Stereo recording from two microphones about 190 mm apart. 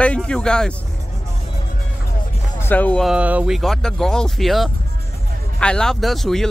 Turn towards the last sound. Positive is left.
turn(degrees=0)  # may be behind; listen again after turning